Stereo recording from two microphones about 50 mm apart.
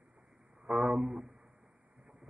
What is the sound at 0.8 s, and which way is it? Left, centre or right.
Speech, centre.